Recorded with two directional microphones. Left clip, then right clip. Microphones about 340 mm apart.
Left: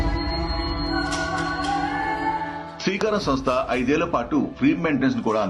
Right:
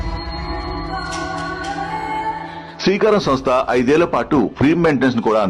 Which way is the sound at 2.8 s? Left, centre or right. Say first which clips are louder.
Right 8 dB; right.